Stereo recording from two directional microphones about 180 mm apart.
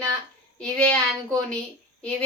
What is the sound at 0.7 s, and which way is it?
Speech, 5° left (ahead or behind).